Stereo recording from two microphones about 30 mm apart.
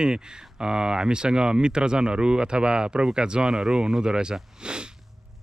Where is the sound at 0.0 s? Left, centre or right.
Right.